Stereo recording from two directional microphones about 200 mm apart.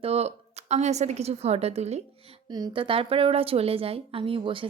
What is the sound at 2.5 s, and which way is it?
A woman's voice, 20° right (ahead or behind).